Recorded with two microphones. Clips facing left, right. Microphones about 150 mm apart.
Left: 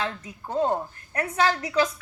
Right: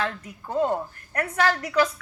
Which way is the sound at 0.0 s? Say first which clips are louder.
Right 1 dB; 20° left (ahead or behind).